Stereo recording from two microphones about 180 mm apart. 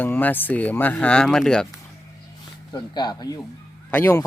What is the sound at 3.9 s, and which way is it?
Speech, 10° left (ahead or behind).